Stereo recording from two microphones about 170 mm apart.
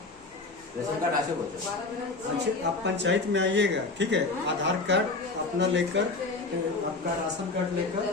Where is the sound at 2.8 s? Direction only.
90° right.